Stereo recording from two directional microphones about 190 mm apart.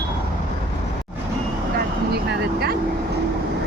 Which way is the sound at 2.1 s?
60° right (ahead or behind).